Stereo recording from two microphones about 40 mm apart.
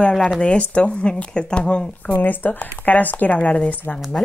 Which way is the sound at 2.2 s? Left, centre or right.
Left.